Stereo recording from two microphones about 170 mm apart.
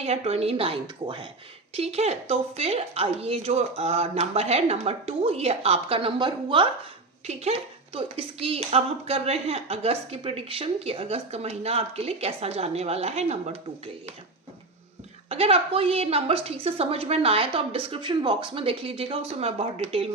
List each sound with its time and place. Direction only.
0.0 s speech: 40° right (ahead or behind)
1.7 s speech: 35° right (ahead or behind)
7.3 s speech: 40° right (ahead or behind)
15.3 s speech: 35° right (ahead or behind)